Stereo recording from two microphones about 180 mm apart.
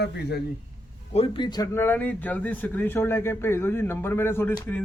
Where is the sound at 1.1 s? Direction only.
30° left (ahead or behind).